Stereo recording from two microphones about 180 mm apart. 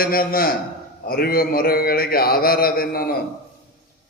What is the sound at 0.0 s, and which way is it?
A man's voice, 55° left (ahead or behind).